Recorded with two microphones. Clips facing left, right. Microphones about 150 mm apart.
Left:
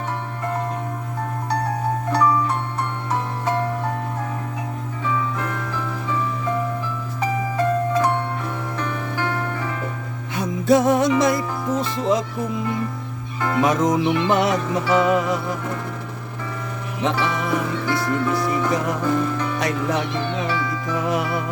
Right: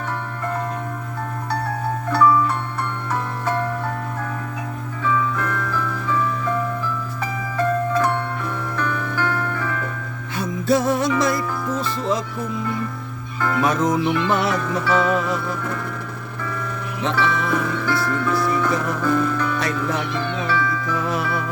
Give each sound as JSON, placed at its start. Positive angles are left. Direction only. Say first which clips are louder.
{"t": 2.2, "sound": "music", "louder": "right 4 dB", "side_deg": 40}
{"t": 5.0, "sound": "music", "louder": "right 3 dB", "side_deg": 25}
{"t": 8.4, "sound": "music", "louder": "right 2 dB", "side_deg": 20}
{"t": 11.7, "sound": "speech", "louder": "left 4 dB", "side_deg": 20}
{"t": 13.4, "sound": "music", "louder": "left 1 dB", "side_deg": 20}
{"t": 17.0, "sound": "music", "louder": "even", "side_deg": 15}